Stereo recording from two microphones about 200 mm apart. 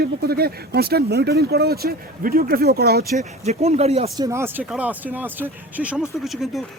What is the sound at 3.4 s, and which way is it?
Speech, 35° right (ahead or behind).